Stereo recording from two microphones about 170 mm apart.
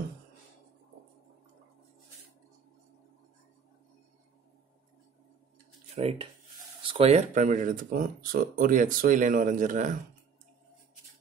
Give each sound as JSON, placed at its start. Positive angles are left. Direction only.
{"t": 5.9, "sound": "speech", "side_deg": -35}